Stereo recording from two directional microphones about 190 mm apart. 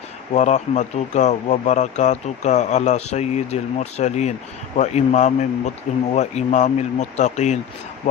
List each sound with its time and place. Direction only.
0.3 s speech: 40° left (ahead or behind)